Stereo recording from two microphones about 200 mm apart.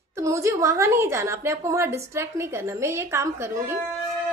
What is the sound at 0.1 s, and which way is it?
A woman's voice, 15° right (ahead or behind).